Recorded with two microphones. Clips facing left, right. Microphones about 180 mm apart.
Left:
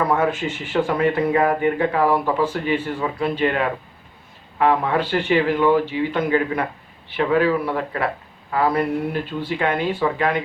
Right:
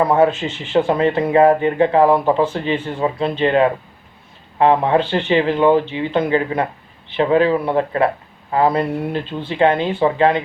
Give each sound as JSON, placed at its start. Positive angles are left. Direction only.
{"t": 0.0, "sound": "speech", "side_deg": -25}